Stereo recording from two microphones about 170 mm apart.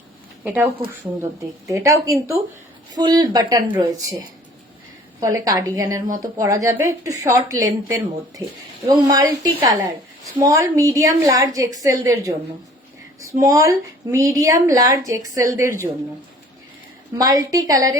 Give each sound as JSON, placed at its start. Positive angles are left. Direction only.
{"t": 0.4, "sound": "speech", "side_deg": -10}
{"t": 5.2, "sound": "speech", "side_deg": -20}
{"t": 17.2, "sound": "speech", "side_deg": -20}